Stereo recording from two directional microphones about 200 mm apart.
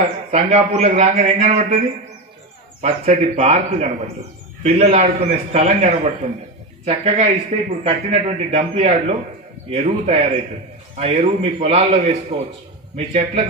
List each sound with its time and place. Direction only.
0.0 s speech: 30° right (ahead or behind)
2.8 s speech: 30° right (ahead or behind)